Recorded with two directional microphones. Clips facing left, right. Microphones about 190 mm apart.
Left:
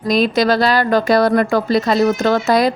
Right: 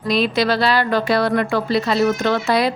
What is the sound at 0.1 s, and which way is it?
A woman's voice, 45° left (ahead or behind).